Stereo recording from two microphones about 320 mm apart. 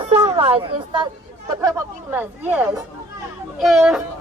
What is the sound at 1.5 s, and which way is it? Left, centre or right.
A woman's voice, centre.